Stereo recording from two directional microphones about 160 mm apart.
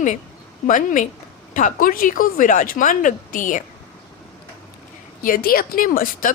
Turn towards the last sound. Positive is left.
turn(degrees=60)  # may be behind; listen again after turning